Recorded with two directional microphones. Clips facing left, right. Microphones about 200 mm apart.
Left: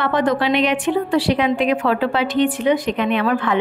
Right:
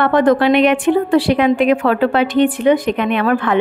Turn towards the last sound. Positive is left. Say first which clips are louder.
# right 3 dB
turn(degrees=-55)  # may be behind; listen again after turning